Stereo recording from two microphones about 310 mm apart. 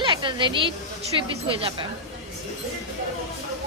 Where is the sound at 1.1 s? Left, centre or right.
Centre.